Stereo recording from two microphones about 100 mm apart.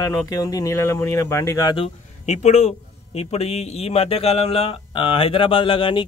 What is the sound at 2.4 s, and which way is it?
A man's voice, 90° left.